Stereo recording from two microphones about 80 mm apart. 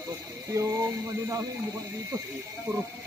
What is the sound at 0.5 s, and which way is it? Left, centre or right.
Speech, right.